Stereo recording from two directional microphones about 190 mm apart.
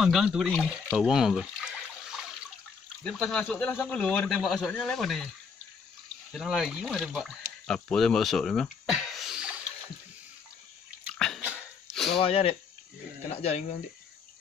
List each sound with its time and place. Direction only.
0.0 s speech: centre (ahead or behind)
3.0 s speech: 5° left (ahead or behind)
6.3 s speech: centre (ahead or behind)
11.1 s bathtub: 5° left (ahead or behind)
11.4 s a sound: 5° right (ahead or behind)
12.2 s speech: 30° left (ahead or behind)